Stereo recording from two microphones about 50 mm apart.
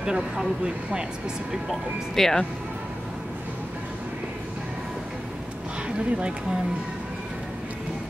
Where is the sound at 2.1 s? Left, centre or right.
Centre.